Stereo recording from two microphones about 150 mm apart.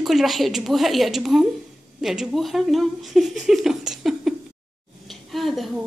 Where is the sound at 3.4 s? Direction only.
5° right (ahead or behind).